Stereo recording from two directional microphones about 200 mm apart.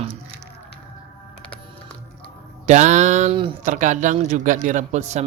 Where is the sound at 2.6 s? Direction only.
35° right (ahead or behind).